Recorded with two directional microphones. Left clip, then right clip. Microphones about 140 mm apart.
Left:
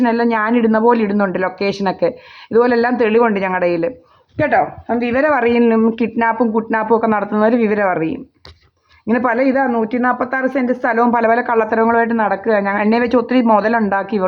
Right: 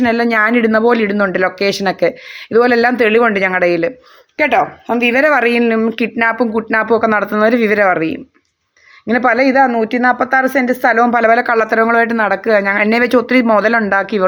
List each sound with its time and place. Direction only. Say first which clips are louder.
0.0 s speech: right 3 dB; 20° right (ahead or behind); by 6.5 s 5° right (ahead or behind)
6.5 s speech: right 2 dB; 15° right (ahead or behind)
10.3 s speech: right 5 dB; 55° right (ahead or behind)
11.1 s speech: right 3 dB; 15° right (ahead or behind)